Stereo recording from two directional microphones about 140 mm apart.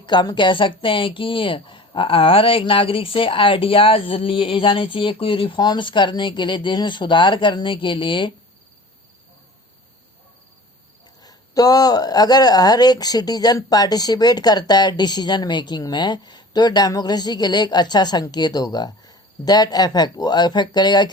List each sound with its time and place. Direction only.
0.0 s speech: 30° left (ahead or behind)
11.2 s speech: 25° left (ahead or behind)